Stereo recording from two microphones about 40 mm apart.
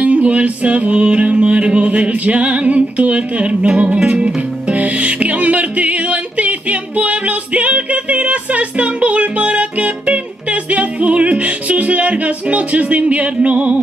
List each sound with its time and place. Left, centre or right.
0.0 s music: right